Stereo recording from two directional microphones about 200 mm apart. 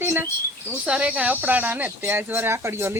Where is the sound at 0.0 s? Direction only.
10° right (ahead or behind).